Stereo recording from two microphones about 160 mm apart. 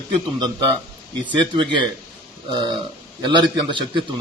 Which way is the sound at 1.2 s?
30° right (ahead or behind).